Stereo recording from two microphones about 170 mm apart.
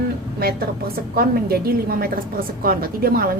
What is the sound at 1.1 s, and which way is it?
Speech, 65° right (ahead or behind).